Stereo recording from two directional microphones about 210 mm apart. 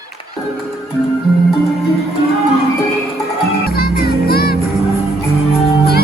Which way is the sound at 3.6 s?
50° left (ahead or behind).